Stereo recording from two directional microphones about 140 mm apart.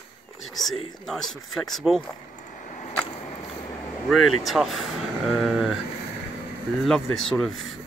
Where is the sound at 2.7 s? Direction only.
55° left (ahead or behind).